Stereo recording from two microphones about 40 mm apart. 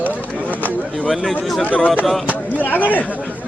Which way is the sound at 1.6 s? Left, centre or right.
Left.